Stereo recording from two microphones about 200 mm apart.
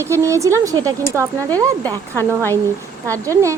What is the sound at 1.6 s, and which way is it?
Speech, 20° right (ahead or behind).